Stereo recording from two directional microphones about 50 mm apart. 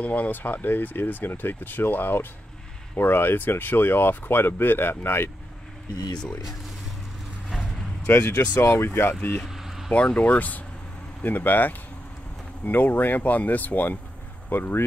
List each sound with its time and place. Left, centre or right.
0.0 s speech: left
7.4 s vehicle: centre
8.1 s speech: left
8.4 s speech: left
9.5 s a sound: centre
10.0 s speech: left